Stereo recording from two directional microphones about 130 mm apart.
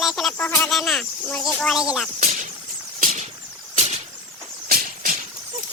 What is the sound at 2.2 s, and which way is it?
Whip, 60° right (ahead or behind).